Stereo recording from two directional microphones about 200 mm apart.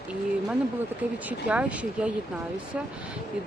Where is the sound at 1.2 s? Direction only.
5° right (ahead or behind).